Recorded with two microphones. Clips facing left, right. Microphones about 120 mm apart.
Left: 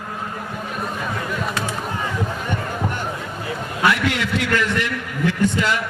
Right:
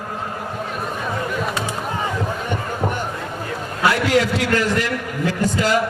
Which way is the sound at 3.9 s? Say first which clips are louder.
Right 4 dB; 35° right (ahead or behind).